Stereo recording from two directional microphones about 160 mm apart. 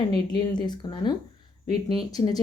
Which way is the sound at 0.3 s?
25° left (ahead or behind).